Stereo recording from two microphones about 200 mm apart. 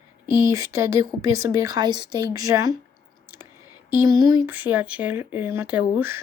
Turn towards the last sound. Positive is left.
turn(degrees=-10)  # may be behind; listen again after turning